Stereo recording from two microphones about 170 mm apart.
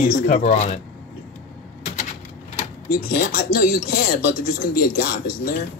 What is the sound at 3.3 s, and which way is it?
Speech, 60° left (ahead or behind).